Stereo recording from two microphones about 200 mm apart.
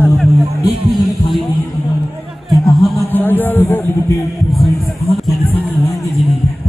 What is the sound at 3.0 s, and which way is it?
Speech, 10° left (ahead or behind).